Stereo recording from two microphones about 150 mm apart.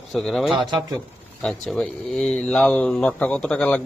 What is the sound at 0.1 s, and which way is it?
Speech, centre (ahead or behind).